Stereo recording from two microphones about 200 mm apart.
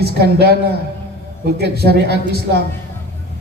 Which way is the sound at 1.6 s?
55° right (ahead or behind).